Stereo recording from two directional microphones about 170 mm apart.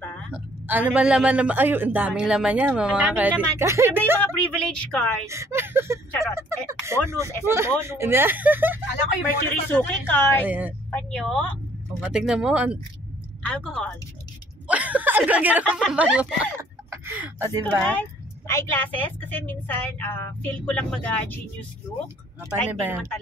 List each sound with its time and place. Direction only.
0.3 s a man's voice: 10° right (ahead or behind)
4.2 s a woman's voice: 5° left (ahead or behind)
5.2 s a man's voice: 15° right (ahead or behind)
9.7 s a woman's voice: 10° left (ahead or behind)
10.4 s a man's voice: 10° right (ahead or behind)
10.9 s speech: 5° left (ahead or behind)
13.5 s speech: 5° left (ahead or behind)
14.7 s chuckle: 10° right (ahead or behind)
15.7 s speech: 5° right (ahead or behind)
17.6 s a woman's voice: 10° left (ahead or behind)
22.7 s a man's voice: 10° right (ahead or behind)